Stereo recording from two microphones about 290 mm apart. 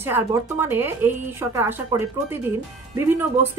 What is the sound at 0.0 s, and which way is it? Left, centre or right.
A woman's voice, centre.